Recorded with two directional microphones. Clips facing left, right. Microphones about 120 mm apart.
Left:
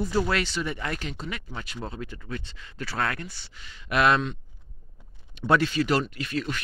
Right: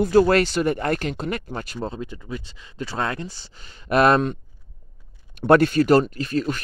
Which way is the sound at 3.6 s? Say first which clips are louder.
Right 5 dB; 45° right (ahead or behind).